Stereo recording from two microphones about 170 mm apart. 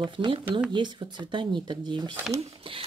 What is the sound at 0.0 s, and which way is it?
Speech, 30° right (ahead or behind).